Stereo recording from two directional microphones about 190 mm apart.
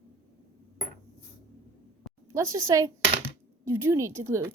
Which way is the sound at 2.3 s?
15° right (ahead or behind).